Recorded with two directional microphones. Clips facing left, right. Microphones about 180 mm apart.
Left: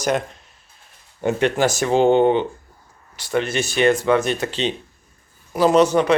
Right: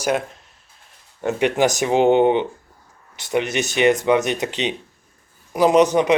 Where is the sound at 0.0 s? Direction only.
5° right (ahead or behind).